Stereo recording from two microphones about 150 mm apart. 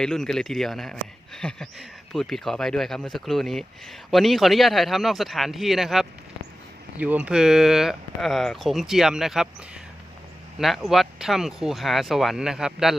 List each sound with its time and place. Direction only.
0.0 s speech: 5° left (ahead or behind)
10.6 s speech: centre (ahead or behind)